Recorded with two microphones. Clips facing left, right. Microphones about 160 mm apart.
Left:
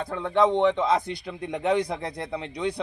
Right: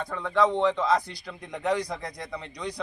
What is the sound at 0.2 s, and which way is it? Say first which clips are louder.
Speech: left 3 dB; 25° left (ahead or behind).